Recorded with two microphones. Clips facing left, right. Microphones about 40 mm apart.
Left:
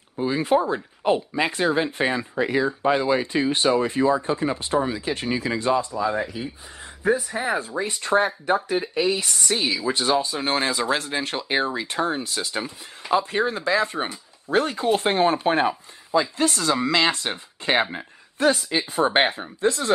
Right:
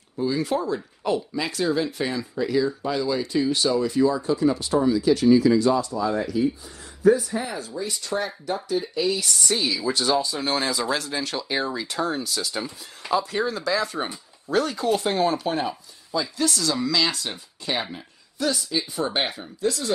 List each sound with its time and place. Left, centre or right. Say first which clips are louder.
0.2 s speech: left 3 dB; left